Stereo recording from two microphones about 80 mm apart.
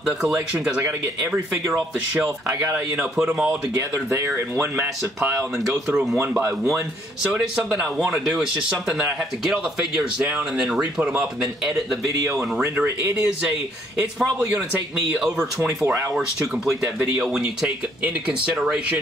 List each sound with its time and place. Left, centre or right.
2.4 s speech: right
3.2 s speech: centre
3.9 s speech: right
4.6 s speech: right
7.3 s speech: centre
12.1 s speech: right
13.2 s speech: centre
15.1 s speech: centre
18.0 s speech: centre